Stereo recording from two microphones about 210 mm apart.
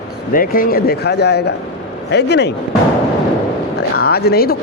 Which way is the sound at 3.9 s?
50° left (ahead or behind).